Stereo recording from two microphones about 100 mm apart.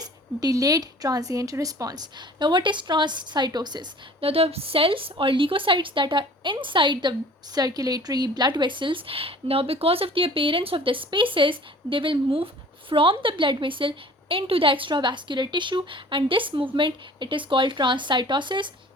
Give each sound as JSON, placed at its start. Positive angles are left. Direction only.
{"t": 0.0, "sound": "speech", "side_deg": -40}
{"t": 4.2, "sound": "speech", "side_deg": -75}